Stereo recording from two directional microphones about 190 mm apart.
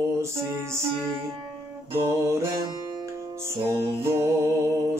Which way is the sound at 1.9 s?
15° right (ahead or behind).